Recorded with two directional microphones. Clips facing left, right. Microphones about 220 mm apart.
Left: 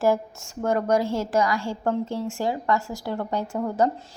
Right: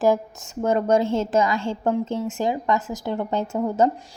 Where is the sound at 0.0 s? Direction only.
20° right (ahead or behind).